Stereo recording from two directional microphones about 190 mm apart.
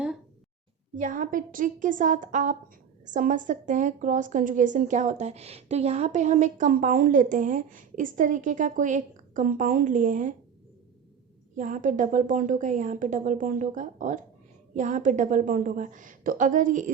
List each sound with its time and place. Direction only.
0.9 s a woman's voice: 45° right (ahead or behind)
11.5 s a woman's voice: 45° right (ahead or behind)